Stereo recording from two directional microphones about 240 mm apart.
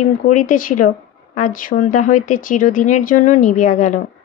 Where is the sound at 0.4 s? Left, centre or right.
Left.